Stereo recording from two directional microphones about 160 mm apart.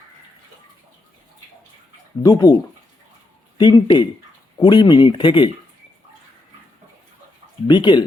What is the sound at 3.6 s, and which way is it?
Speech, 25° left (ahead or behind).